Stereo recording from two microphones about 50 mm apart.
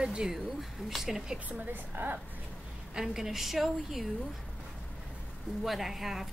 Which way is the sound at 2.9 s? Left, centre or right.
Centre.